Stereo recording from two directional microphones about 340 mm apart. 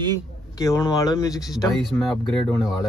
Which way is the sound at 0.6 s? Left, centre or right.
Centre.